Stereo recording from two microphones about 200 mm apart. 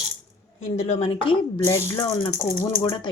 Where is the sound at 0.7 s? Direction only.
30° left (ahead or behind).